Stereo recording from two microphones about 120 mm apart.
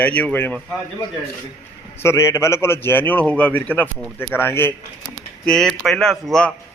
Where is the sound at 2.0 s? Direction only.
20° left (ahead or behind).